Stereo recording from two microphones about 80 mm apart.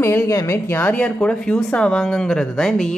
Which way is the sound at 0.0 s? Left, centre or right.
Left.